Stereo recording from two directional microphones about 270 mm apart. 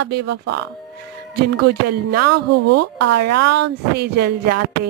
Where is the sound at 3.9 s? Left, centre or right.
Right.